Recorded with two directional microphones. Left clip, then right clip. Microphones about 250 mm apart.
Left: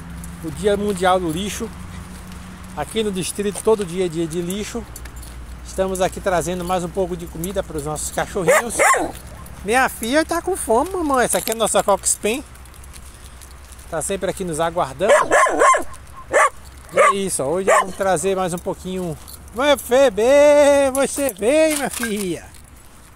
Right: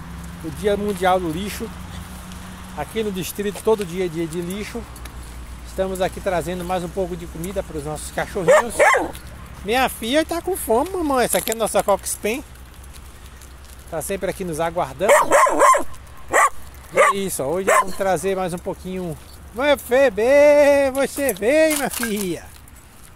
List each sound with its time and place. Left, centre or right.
0.6 s speech: centre
2.8 s speech: centre
5.8 s speech: centre
8.7 s speech: left
9.7 s speech: centre
13.9 s speech: centre
15.0 s speech: right
16.3 s dog: right
17.1 s speech: centre
17.6 s speech: right
17.9 s speech: centre